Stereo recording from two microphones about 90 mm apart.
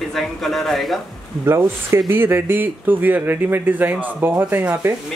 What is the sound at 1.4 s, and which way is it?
Speech, 30° right (ahead or behind).